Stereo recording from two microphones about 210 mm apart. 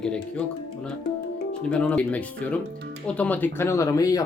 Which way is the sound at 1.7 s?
5° left (ahead or behind).